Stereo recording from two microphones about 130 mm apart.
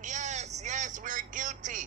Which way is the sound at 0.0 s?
65° right (ahead or behind).